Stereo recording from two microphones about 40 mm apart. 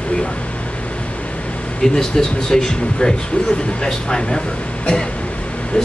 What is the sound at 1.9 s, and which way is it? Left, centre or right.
Speech, centre.